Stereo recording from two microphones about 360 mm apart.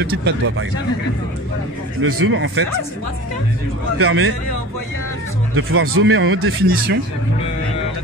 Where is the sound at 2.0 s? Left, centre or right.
Right.